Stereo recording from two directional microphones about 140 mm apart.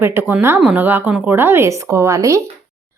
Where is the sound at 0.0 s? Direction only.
15° right (ahead or behind).